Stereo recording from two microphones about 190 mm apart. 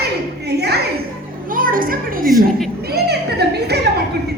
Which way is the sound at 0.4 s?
60° right (ahead or behind).